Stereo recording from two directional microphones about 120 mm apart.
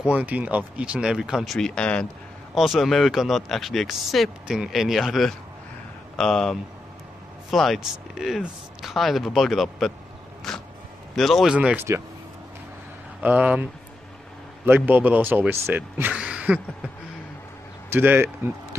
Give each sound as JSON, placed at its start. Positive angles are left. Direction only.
{"t": 0.0, "sound": "speech", "side_deg": -10}
{"t": 11.5, "sound": "speech", "side_deg": -10}
{"t": 13.2, "sound": "speech", "side_deg": -10}
{"t": 14.7, "sound": "speech", "side_deg": -15}
{"t": 17.9, "sound": "speech", "side_deg": -15}